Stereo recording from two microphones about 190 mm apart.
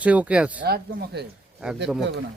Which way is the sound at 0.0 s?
5° right (ahead or behind).